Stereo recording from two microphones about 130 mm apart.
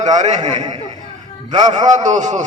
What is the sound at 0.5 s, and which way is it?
Speech, 35° right (ahead or behind).